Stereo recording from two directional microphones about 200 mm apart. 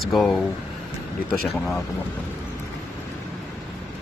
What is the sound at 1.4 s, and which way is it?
Speech, centre (ahead or behind).